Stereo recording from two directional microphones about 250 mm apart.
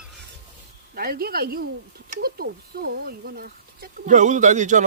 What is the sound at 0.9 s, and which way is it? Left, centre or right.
Speech, right.